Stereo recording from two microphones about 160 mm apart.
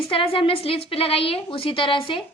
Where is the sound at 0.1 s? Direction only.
35° left (ahead or behind).